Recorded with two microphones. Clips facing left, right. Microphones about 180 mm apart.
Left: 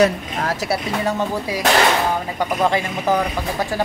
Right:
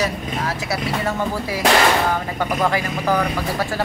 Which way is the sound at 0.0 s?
45° left (ahead or behind).